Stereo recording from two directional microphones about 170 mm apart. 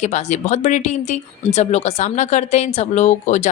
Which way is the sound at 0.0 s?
40° left (ahead or behind).